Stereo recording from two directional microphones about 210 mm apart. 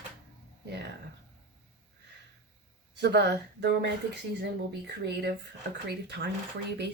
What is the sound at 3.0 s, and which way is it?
Speech, 55° right (ahead or behind).